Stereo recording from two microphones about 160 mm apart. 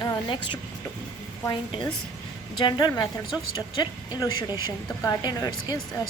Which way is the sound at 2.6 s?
30° left (ahead or behind).